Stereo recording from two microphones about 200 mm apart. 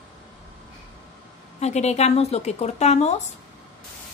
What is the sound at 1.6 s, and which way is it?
Speech, 35° left (ahead or behind).